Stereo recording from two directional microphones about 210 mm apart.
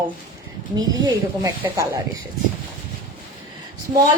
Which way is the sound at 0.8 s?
20° right (ahead or behind).